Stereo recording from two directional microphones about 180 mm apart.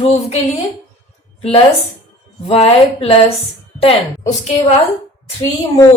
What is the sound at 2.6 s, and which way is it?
A woman's voice, 35° left (ahead or behind).